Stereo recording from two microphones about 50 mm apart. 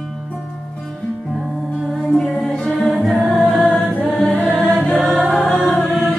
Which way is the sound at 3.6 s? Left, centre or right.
Left.